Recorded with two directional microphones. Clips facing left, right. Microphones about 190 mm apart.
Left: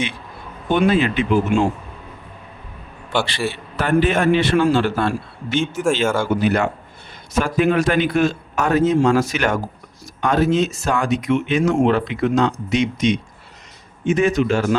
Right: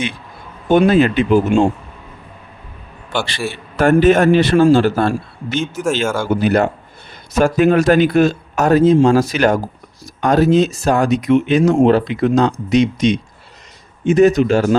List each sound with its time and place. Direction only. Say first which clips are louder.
0.7 s speech: right 5 dB; 40° right (ahead or behind)
3.5 s speech: right 8 dB; 45° right (ahead or behind)
5.8 s speech: right 1 dB; 5° right (ahead or behind)
6.4 s speech: right 4 dB; 40° right (ahead or behind)